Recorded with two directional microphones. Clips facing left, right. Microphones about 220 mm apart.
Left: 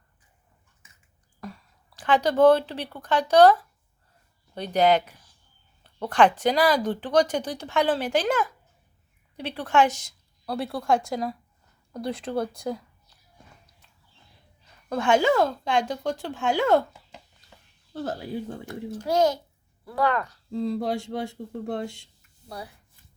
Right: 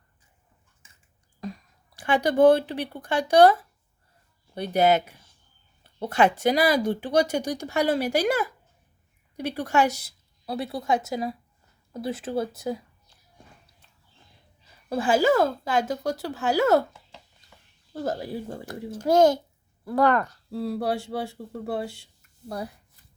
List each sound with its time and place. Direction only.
1.4 s speech: 15° right (ahead or behind)
9.9 s a woman's voice: 35° right (ahead or behind)
10.4 s speech: centre (ahead or behind)
14.8 s speech: 5° right (ahead or behind)
18.1 s speech: 5° right (ahead or behind)
18.9 s a child's voice: 45° right (ahead or behind)
20.5 s speech: 5° right (ahead or behind)
22.4 s a child's voice: 50° right (ahead or behind)